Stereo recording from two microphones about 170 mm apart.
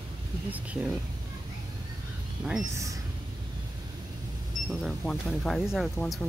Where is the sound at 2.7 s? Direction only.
20° right (ahead or behind).